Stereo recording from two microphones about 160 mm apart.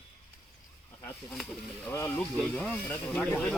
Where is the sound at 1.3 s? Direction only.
5° left (ahead or behind).